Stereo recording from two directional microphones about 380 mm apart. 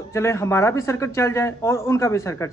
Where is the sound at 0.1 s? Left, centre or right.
Centre.